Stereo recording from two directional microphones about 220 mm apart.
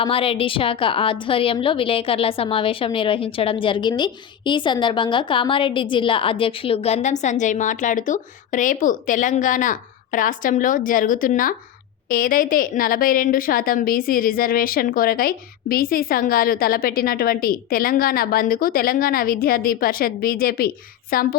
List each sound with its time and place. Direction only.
0.0 s a woman's voice: 25° left (ahead or behind); by 21.3 s 40° left (ahead or behind)